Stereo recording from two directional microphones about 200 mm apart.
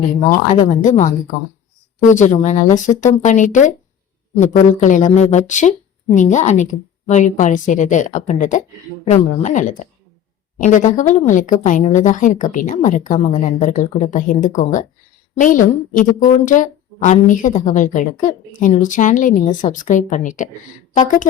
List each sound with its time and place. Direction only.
0.2 s a woman's voice: 40° left (ahead or behind)